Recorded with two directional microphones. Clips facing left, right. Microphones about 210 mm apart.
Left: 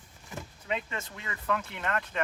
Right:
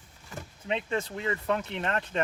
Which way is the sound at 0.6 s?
30° right (ahead or behind).